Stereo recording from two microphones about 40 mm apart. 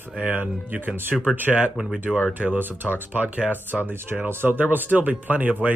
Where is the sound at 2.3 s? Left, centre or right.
Right.